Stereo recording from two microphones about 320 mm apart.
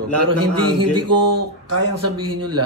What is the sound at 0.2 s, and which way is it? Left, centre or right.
Speech, right.